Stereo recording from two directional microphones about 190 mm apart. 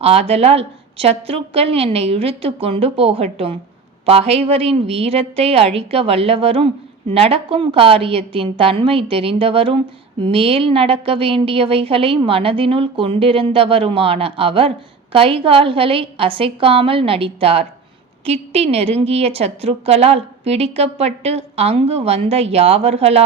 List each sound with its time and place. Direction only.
0.0 s a woman's voice: 30° right (ahead or behind)